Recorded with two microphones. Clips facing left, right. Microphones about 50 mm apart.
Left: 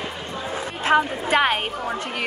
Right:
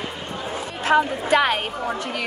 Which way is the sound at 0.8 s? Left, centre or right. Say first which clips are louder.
Right 1 dB; left.